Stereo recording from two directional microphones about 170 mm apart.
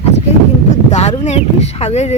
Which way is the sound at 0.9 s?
40° left (ahead or behind).